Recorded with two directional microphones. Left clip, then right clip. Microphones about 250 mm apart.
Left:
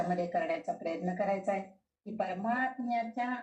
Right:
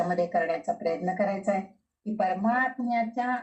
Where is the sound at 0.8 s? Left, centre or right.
Right.